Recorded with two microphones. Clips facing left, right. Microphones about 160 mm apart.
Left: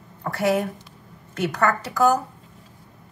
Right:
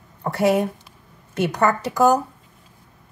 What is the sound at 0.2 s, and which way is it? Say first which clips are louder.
Speech: right 3 dB; 25° right (ahead or behind).